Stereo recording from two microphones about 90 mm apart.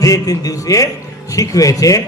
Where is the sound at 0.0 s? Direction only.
40° left (ahead or behind).